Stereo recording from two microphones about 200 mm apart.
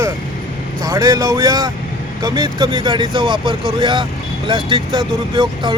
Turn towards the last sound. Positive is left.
turn(degrees=-25)  # may be behind; listen again after turning